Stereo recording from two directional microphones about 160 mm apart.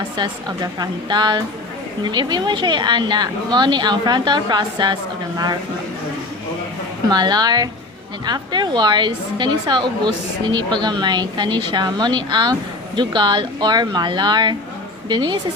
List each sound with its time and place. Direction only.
0.2 s a woman's voice: 25° right (ahead or behind)
7.1 s a woman's voice: 25° right (ahead or behind)